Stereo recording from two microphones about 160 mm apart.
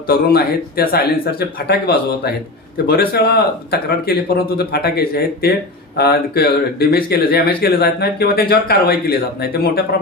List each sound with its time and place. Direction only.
0.1 s speech: 70° left (ahead or behind)
2.7 s speech: 70° left (ahead or behind)